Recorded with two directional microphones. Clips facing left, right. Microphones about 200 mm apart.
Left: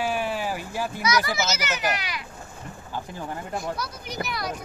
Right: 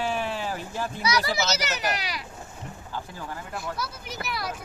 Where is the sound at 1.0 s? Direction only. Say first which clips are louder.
Left 1 dB; 30° right (ahead or behind).